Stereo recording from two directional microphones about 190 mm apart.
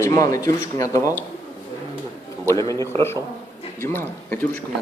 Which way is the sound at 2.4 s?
15° left (ahead or behind).